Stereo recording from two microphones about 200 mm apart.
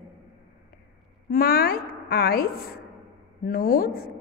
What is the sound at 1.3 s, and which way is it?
A woman's voice, 45° left (ahead or behind).